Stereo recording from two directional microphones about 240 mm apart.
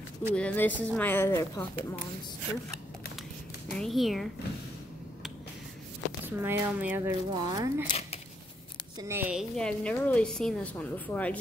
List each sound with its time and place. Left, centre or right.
0.4 s speech: centre
3.7 s a woman's voice: centre
6.2 s speech: centre
7.8 s a sound: left
8.9 s a woman's voice: centre